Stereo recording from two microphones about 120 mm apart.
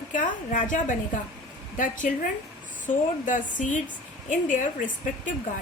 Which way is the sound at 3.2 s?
90° left.